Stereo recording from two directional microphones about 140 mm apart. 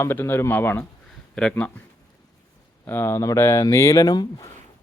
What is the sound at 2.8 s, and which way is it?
Speech, 15° left (ahead or behind).